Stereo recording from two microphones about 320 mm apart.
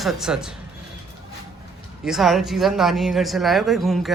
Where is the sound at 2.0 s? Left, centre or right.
Centre.